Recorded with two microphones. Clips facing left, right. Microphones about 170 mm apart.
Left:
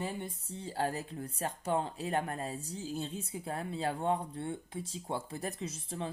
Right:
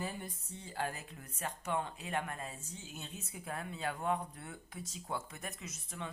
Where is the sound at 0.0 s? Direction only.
25° left (ahead or behind).